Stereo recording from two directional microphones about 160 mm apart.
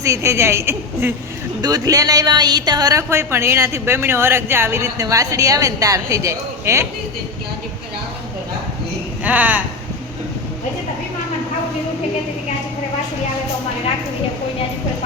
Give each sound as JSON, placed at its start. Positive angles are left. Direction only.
{"t": 0.0, "sound": "a woman's voice", "side_deg": -20}
{"t": 9.2, "sound": "a woman's voice", "side_deg": -10}